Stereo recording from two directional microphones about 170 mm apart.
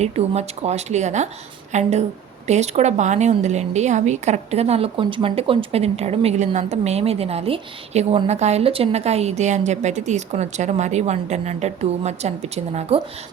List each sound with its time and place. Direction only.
0.0 s a woman's voice: 40° right (ahead or behind)